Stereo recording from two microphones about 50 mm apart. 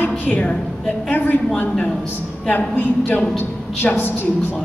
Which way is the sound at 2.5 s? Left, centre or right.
Left.